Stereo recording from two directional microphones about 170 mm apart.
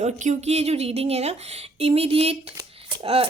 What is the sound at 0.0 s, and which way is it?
Speech, 45° right (ahead or behind).